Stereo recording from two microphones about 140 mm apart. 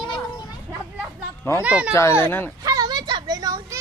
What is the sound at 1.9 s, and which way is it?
Speech, 20° left (ahead or behind).